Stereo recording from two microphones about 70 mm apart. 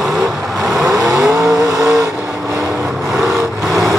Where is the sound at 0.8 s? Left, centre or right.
Right.